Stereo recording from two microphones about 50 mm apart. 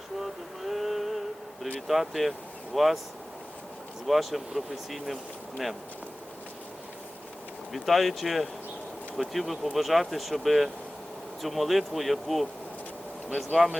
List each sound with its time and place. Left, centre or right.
0.2 s a sound: centre
1.9 s speech: centre
4.0 s speech: centre
7.7 s speech: centre